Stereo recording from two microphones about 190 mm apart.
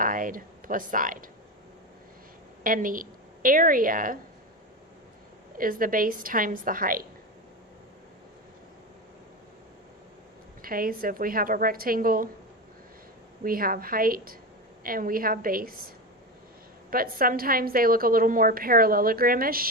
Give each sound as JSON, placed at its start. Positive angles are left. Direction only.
{"t": 0.0, "sound": "speech", "side_deg": -45}
{"t": 2.6, "sound": "a woman's voice", "side_deg": -45}
{"t": 5.5, "sound": "a woman's voice", "side_deg": -45}
{"t": 10.6, "sound": "a woman's voice", "side_deg": -50}
{"t": 13.4, "sound": "a woman's voice", "side_deg": -50}
{"t": 16.9, "sound": "a woman's voice", "side_deg": -50}